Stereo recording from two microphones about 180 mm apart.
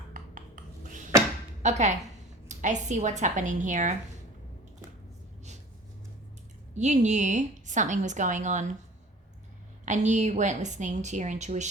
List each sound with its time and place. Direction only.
0.1 s a sound: 45° right (ahead or behind)
1.6 s a woman's voice: 40° right (ahead or behind)
6.7 s a woman's voice: 40° right (ahead or behind)
9.8 s a woman's voice: 40° right (ahead or behind)